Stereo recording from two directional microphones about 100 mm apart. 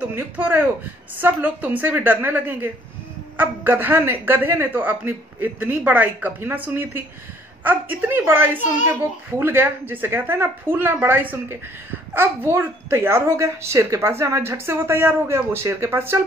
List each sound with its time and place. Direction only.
0.0 s a child's voice: 20° right (ahead or behind)